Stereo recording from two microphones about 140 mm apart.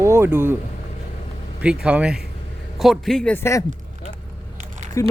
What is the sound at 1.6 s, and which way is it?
A man's voice, 10° right (ahead or behind).